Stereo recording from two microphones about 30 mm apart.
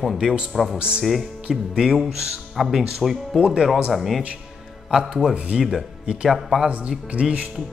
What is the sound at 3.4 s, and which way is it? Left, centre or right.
Speech, right.